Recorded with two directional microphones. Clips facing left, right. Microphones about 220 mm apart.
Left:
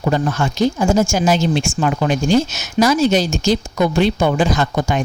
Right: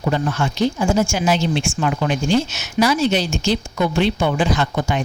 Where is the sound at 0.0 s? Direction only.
45° left (ahead or behind).